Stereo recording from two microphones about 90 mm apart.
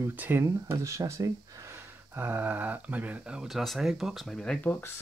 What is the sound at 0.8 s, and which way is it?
Speech, 35° right (ahead or behind).